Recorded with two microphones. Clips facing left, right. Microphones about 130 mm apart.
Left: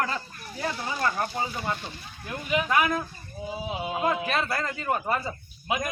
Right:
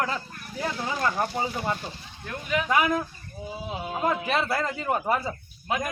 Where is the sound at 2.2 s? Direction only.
5° left (ahead or behind).